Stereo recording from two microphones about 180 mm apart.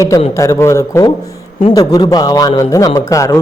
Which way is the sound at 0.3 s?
15° left (ahead or behind).